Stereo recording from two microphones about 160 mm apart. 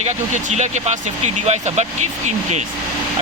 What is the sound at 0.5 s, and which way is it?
Speech, 45° right (ahead or behind).